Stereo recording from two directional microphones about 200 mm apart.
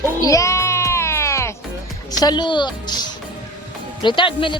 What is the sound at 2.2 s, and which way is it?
Speech, 20° left (ahead or behind).